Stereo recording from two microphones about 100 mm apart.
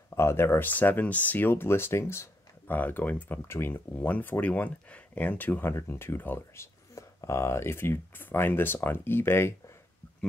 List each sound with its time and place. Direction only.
0.1 s speech: 25° left (ahead or behind)